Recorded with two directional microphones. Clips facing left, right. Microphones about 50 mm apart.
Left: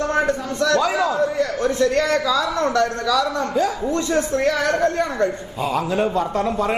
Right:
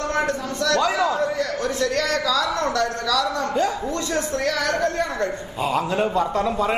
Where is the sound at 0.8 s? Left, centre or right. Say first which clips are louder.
Left 1 dB; centre.